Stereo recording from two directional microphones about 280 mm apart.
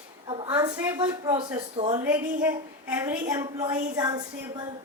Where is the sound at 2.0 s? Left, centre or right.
Centre.